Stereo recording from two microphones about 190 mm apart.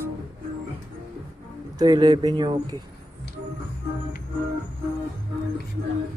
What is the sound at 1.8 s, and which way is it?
Speech, 20° right (ahead or behind).